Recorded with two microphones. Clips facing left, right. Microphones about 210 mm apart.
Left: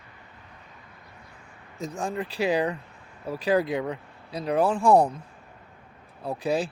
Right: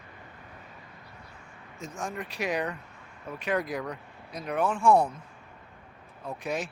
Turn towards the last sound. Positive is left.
turn(degrees=30)  # may be behind; listen again after turning